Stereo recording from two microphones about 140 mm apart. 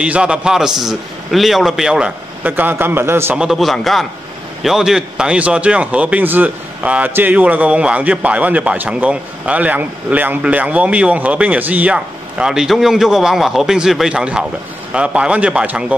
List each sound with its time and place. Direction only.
0.0 s speech: 5° right (ahead or behind)
3.3 s a man's voice: centre (ahead or behind)